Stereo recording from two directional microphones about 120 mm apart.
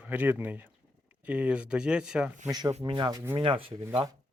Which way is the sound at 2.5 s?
30° right (ahead or behind).